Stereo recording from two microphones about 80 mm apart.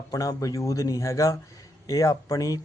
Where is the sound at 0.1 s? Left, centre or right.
Left.